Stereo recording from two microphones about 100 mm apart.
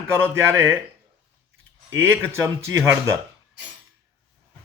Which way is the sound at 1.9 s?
25° right (ahead or behind).